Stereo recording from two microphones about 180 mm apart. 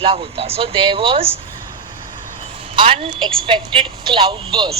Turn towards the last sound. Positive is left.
turn(degrees=-25)  # may be behind; listen again after turning